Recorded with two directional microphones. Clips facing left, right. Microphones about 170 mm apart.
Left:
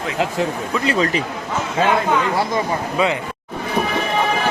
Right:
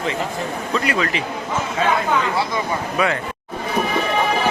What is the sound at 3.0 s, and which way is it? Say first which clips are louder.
Speech: left 1 dB; 25° left (ahead or behind).